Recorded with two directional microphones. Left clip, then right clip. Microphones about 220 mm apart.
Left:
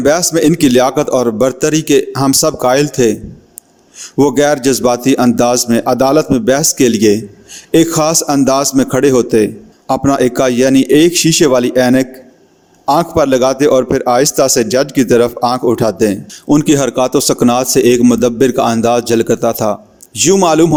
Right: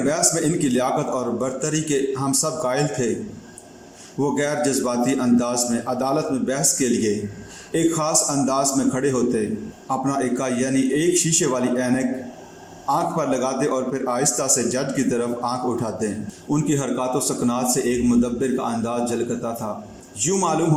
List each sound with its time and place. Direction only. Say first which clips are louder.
0.0 s a man's voice: left 11 dB; 45° left (ahead or behind)
4.2 s a man's voice: left 11 dB; 45° left (ahead or behind)